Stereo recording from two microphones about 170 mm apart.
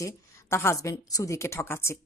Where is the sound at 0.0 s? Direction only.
15° left (ahead or behind).